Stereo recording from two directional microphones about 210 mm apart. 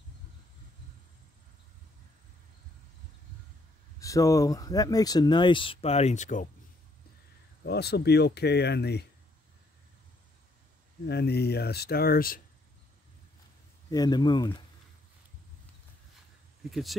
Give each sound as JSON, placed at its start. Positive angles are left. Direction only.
{"t": 4.0, "sound": "speech", "side_deg": 15}
{"t": 7.6, "sound": "speech", "side_deg": 50}
{"t": 11.1, "sound": "speech", "side_deg": 50}
{"t": 13.8, "sound": "speech", "side_deg": 20}